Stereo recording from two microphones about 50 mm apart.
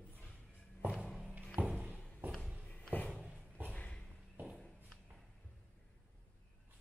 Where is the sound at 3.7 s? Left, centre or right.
Left.